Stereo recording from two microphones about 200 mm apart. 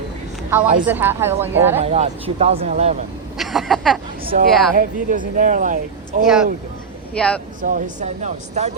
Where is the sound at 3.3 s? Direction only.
Centre (ahead or behind).